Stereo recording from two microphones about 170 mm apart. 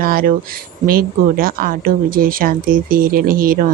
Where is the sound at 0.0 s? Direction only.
60° right (ahead or behind).